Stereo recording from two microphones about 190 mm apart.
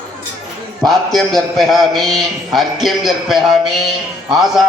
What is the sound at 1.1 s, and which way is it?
A man's voice, centre (ahead or behind).